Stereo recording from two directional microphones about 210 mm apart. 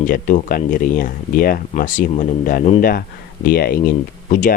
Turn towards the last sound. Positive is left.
turn(degrees=40)  # may be behind; listen again after turning